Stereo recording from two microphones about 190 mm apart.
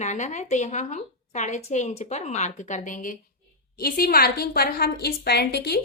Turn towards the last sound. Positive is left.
turn(degrees=60)  # may be behind; listen again after turning